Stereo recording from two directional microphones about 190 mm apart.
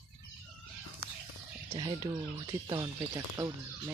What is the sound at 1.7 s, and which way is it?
Speech, 20° right (ahead or behind).